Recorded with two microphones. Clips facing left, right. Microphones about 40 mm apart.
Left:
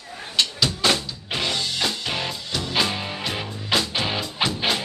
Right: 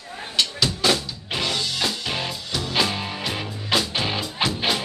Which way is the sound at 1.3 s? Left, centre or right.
Centre.